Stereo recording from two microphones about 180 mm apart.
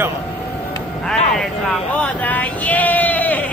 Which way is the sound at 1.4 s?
5° left (ahead or behind).